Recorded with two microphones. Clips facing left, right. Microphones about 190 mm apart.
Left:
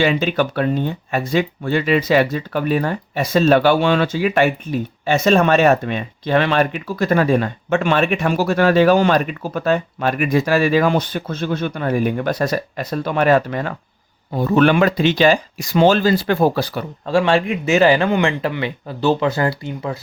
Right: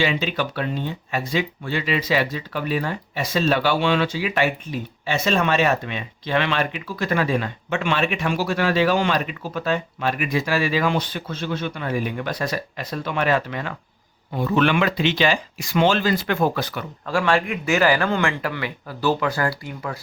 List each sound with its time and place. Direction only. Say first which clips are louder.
0.0 s speech: left 6 dB; 50° left (ahead or behind); by 20.0 s 25° left (ahead or behind)